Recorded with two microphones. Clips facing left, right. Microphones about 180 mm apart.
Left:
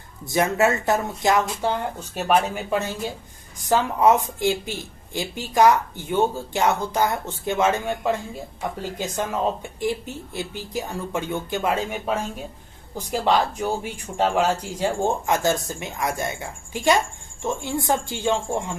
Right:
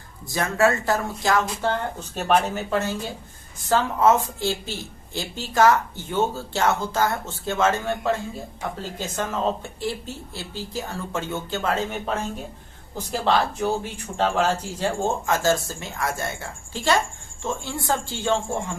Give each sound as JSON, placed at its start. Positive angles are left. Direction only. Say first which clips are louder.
{"t": 0.3, "sound": "a woman's voice", "louder": "left 1 dB", "side_deg": 20}
{"t": 10.3, "sound": "a woman's voice", "louder": "left 3 dB", "side_deg": 15}